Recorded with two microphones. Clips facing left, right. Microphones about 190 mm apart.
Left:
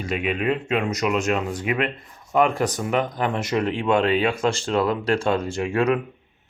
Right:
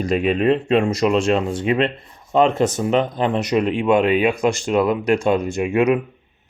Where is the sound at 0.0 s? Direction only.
35° right (ahead or behind); by 6.0 s 15° right (ahead or behind).